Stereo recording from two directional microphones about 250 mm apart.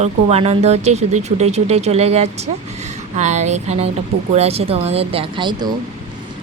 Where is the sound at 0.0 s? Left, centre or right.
Right.